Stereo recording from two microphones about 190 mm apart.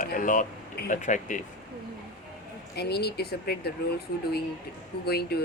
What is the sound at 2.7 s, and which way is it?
Speech, 60° left (ahead or behind).